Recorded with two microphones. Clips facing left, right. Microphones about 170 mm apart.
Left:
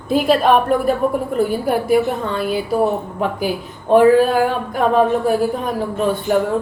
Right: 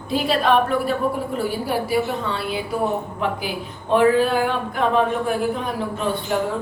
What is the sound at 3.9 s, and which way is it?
A woman's voice, 45° left (ahead or behind).